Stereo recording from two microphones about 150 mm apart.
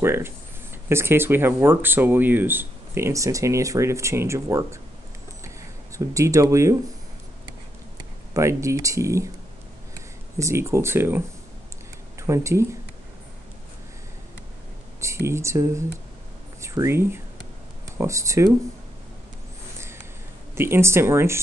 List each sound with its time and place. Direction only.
0.0 s speech: 15° right (ahead or behind)
5.9 s speech: 20° right (ahead or behind)
8.3 s speech: 20° right (ahead or behind)
10.4 s speech: 20° right (ahead or behind)
15.0 s speech: 20° right (ahead or behind)
20.5 s speech: 15° right (ahead or behind)